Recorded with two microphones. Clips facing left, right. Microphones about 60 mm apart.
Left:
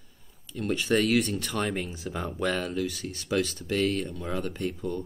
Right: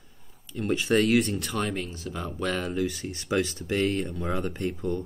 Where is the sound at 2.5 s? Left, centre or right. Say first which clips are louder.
Right 1 dB; centre.